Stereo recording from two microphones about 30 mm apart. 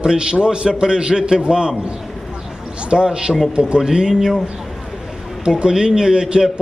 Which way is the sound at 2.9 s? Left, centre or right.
Right.